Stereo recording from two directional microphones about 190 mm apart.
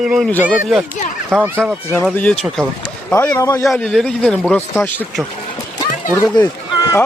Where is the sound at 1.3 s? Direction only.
10° right (ahead or behind).